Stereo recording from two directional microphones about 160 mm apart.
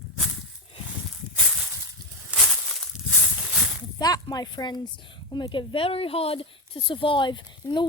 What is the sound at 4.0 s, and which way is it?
Speech, 25° left (ahead or behind).